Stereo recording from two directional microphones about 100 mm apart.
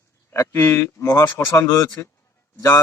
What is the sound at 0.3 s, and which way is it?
A man's voice, 25° left (ahead or behind).